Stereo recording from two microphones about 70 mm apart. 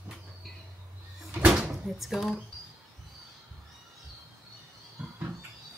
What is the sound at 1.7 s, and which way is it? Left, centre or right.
Speech, centre.